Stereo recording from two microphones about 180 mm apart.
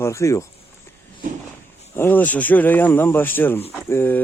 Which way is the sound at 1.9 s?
10° left (ahead or behind).